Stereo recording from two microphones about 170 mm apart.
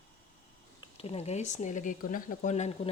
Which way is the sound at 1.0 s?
40° left (ahead or behind).